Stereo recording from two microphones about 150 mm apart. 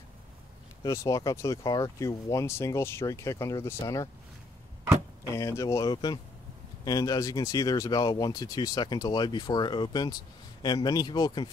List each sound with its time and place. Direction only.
0.8 s speech: 20° left (ahead or behind)
5.3 s speech: 20° left (ahead or behind)